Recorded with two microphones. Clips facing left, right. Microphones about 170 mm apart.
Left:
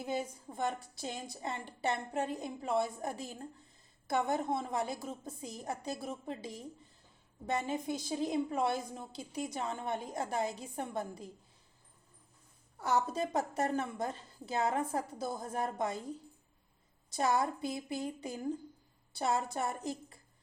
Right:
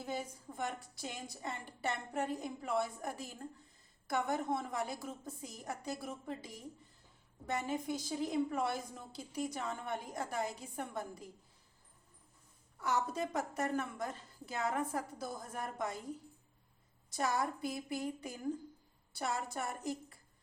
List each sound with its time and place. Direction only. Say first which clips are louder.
0.0 s a woman's voice: left 4 dB; 25° left (ahead or behind)
12.8 s a woman's voice: left 3 dB; 30° left (ahead or behind)
17.1 s a woman's voice: left 4 dB; 25° left (ahead or behind)